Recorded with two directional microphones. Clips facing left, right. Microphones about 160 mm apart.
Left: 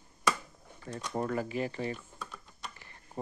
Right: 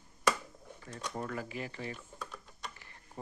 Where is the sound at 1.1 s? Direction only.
35° left (ahead or behind).